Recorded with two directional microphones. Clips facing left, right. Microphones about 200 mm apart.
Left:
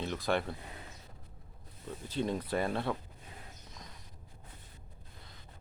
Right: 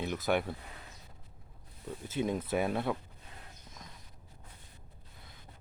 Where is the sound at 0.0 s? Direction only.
10° right (ahead or behind).